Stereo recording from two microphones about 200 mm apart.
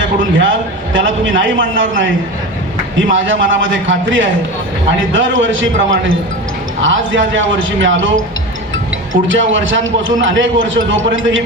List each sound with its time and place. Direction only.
0.0 s a man's voice: 70° right (ahead or behind)
3.1 s a man's voice: 75° right (ahead or behind)
9.2 s a man's voice: 70° right (ahead or behind)